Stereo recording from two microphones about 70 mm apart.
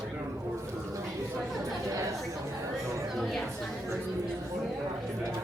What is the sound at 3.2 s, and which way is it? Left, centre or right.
Chatter, centre.